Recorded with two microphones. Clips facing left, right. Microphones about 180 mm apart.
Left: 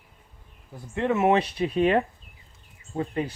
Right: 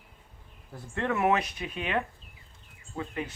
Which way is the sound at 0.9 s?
20° left (ahead or behind).